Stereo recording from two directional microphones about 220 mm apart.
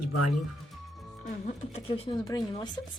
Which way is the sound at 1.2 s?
35° left (ahead or behind).